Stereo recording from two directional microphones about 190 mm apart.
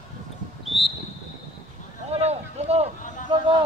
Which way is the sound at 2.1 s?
35° right (ahead or behind).